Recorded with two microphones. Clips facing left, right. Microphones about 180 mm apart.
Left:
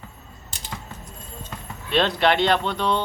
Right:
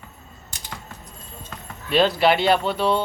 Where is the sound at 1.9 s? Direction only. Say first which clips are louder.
Right 2 dB; 5° right (ahead or behind).